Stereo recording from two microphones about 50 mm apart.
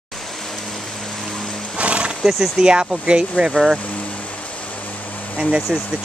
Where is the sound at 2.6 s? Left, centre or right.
Centre.